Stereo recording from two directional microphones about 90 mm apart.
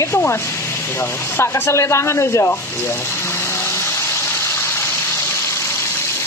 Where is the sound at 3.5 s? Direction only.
30° left (ahead or behind).